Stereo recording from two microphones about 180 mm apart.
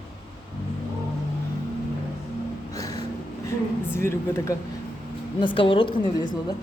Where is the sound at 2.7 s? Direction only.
20° left (ahead or behind).